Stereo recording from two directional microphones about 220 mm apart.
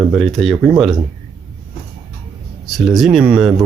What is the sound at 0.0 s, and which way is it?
Speech, centre (ahead or behind).